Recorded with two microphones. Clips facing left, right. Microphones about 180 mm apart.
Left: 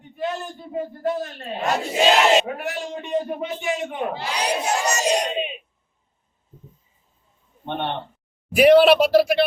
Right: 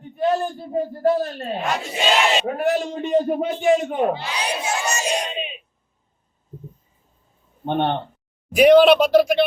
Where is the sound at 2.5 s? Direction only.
40° right (ahead or behind).